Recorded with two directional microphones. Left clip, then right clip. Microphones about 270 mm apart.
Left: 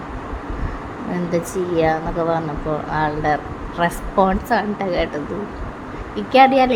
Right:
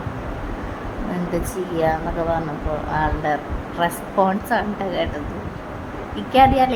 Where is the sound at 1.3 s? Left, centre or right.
Centre.